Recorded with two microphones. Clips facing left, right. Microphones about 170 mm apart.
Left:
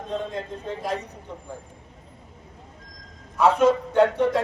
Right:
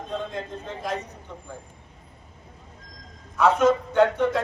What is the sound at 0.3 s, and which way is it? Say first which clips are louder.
Speech: left 2 dB; 35° left (ahead or behind).